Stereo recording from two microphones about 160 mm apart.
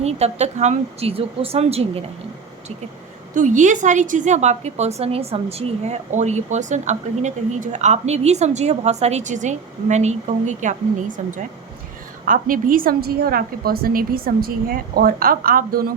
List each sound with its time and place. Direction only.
0.0 s speech: 40° right (ahead or behind)
3.3 s a woman's voice: 50° right (ahead or behind)
12.2 s a woman's voice: 60° right (ahead or behind)